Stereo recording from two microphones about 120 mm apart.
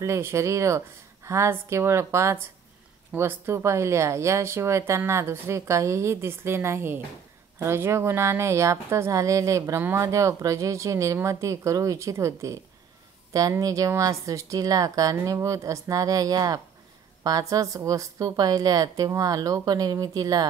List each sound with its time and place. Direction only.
0.0 s a woman's voice: 25° right (ahead or behind)